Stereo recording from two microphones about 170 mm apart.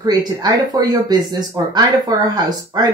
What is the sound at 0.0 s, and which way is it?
Speech, 25° right (ahead or behind).